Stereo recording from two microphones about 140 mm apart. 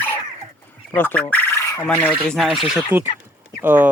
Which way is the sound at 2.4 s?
Centre (ahead or behind).